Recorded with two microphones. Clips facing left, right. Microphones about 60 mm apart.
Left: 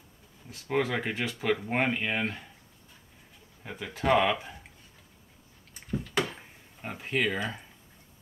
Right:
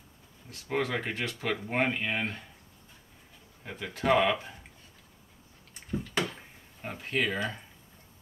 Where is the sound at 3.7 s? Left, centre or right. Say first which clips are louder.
Even; centre.